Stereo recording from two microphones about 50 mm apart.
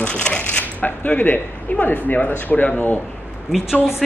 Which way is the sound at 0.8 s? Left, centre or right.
Left.